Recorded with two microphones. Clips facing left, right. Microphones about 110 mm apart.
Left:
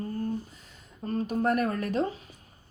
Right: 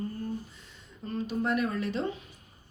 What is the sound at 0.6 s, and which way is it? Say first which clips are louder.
Speech: left 3 dB; 40° left (ahead or behind).